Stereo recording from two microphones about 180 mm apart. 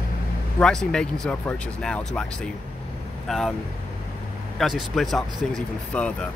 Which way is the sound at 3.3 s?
Centre (ahead or behind).